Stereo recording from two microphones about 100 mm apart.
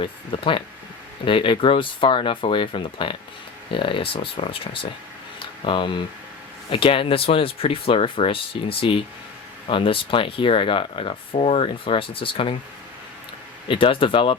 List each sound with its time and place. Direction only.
0.0 s speech: 60° left (ahead or behind)
13.7 s speech: 60° left (ahead or behind)